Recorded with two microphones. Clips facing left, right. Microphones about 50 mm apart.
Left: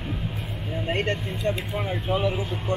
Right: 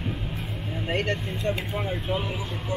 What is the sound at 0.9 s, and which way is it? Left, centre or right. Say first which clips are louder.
Speech: even; left.